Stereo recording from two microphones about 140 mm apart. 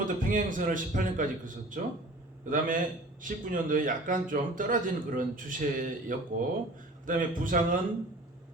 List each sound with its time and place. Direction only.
0.0 s speech: 70° right (ahead or behind)